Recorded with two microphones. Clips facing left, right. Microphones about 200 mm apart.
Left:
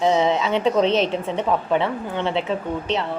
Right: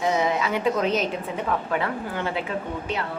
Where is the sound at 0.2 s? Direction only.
25° left (ahead or behind).